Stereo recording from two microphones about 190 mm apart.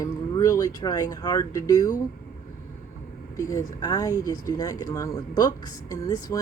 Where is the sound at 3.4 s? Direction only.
15° left (ahead or behind).